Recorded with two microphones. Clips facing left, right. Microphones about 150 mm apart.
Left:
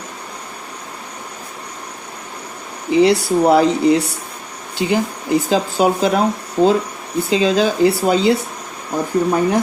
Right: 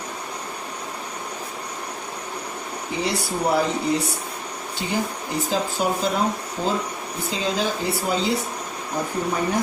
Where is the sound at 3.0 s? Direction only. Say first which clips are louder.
Left 11 dB; 70° left (ahead or behind).